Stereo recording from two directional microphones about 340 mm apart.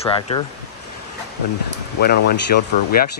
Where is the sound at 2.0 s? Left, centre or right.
Left.